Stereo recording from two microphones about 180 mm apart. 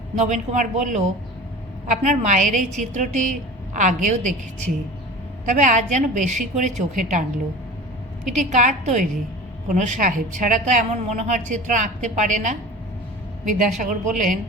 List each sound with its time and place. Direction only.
0.2 s a woman's voice: 40° right (ahead or behind)
5.5 s a woman's voice: 45° right (ahead or behind)